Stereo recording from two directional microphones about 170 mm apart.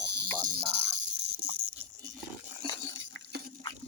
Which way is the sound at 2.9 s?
90° right.